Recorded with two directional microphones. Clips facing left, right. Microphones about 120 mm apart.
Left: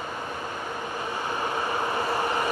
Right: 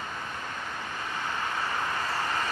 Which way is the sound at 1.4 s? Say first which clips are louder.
Left 5 dB; 20° left (ahead or behind).